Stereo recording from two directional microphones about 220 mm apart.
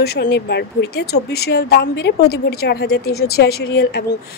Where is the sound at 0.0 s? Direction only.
50° left (ahead or behind).